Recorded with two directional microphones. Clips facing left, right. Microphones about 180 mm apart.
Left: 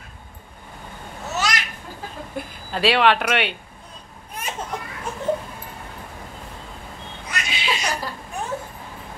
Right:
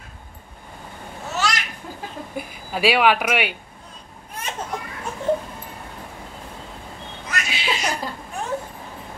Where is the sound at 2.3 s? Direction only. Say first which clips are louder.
Even; 10° right (ahead or behind).